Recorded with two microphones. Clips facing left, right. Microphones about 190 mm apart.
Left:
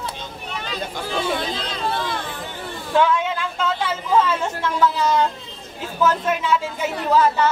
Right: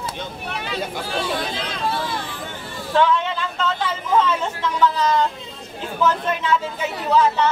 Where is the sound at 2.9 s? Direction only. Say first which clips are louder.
Even; 5° left (ahead or behind).